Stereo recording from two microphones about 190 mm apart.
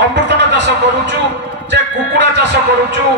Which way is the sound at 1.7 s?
65° right (ahead or behind).